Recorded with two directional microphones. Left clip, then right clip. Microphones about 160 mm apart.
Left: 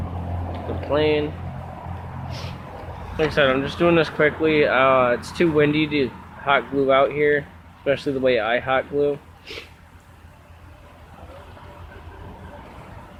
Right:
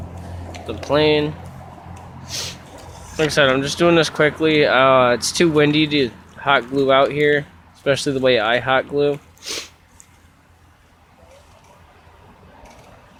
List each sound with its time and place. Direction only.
0.8 s speech: 55° right (ahead or behind)
2.2 s a sound: 50° right (ahead or behind)
3.2 s speech: 55° right (ahead or behind)